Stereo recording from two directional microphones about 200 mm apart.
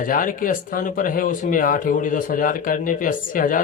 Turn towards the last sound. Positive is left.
turn(degrees=45)  # may be behind; listen again after turning